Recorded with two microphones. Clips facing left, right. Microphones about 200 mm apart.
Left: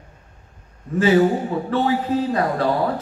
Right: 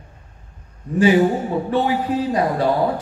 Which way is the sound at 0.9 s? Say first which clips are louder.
Right 1 dB; 15° right (ahead or behind).